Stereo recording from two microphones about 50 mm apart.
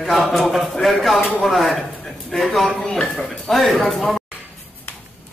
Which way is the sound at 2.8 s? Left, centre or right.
Centre.